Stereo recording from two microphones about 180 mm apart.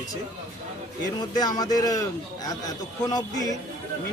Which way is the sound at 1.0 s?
20° left (ahead or behind).